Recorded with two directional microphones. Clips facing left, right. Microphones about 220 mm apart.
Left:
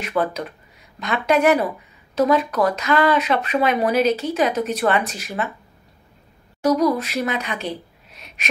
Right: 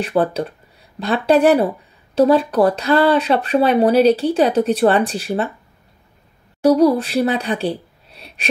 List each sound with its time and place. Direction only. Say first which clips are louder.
0.0 s speech: right 5 dB; 30° right (ahead or behind)
6.6 s speech: right 5 dB; 30° right (ahead or behind)